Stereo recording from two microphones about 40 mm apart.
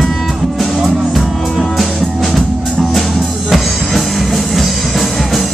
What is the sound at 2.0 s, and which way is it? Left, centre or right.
Music, centre.